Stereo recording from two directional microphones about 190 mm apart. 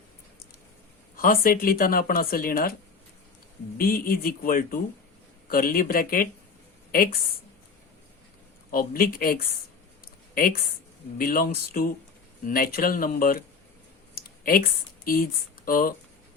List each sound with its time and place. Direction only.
1.1 s speech: 50° left (ahead or behind)
3.8 s speech: 50° left (ahead or behind)
8.7 s speech: 50° left (ahead or behind)
14.2 s a sound: 50° left (ahead or behind)
15.0 s speech: 50° left (ahead or behind)